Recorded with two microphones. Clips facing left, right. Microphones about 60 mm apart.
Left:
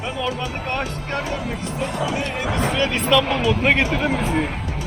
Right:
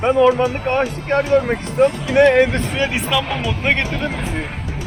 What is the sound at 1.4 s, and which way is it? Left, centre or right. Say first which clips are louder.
Speech: right 10 dB; right.